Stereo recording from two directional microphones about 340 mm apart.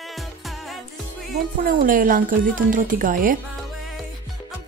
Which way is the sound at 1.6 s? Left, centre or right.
Right.